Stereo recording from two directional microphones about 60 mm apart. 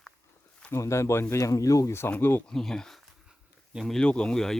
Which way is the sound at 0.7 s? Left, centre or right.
Left.